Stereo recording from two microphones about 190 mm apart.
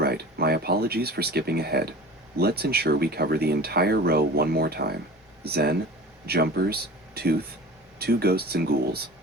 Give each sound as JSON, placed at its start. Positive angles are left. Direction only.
{"t": 0.0, "sound": "speech", "side_deg": -55}